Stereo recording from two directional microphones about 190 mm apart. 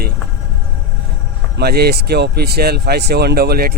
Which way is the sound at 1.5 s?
55° right (ahead or behind).